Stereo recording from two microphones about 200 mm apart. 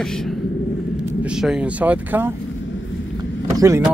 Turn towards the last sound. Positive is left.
turn(degrees=-15)  # may be behind; listen again after turning